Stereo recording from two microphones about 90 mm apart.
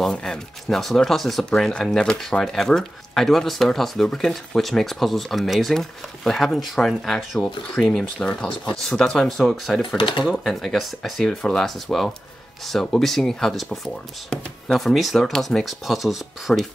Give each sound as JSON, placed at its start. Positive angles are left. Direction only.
{"t": 0.0, "sound": "speech", "side_deg": 10}
{"t": 9.9, "sound": "speech", "side_deg": 60}
{"t": 10.2, "sound": "speech", "side_deg": 0}